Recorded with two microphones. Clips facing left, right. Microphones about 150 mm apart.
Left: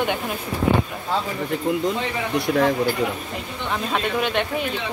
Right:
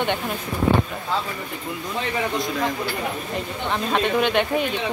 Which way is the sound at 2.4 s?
70° left (ahead or behind).